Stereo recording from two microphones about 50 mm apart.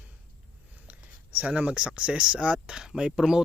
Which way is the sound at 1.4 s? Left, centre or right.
Right.